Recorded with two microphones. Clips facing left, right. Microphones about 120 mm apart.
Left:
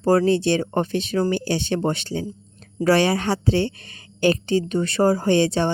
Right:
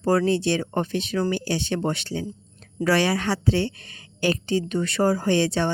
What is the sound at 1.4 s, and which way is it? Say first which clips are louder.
Speech: left 3 dB; 25° left (ahead or behind).